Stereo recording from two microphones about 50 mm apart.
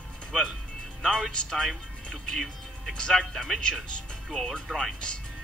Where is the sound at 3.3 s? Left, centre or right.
Centre.